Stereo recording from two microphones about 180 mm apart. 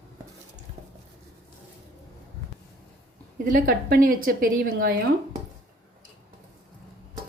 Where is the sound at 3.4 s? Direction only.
50° right (ahead or behind).